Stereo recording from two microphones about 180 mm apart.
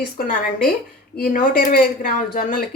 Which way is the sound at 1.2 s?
50° left (ahead or behind).